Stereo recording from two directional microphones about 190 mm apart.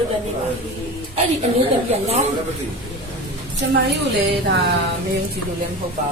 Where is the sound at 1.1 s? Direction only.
35° right (ahead or behind).